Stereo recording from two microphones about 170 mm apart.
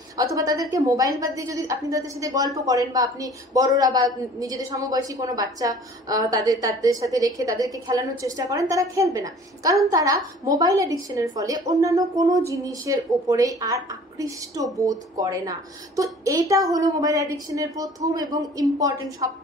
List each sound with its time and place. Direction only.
0.2 s a woman's voice: 20° right (ahead or behind)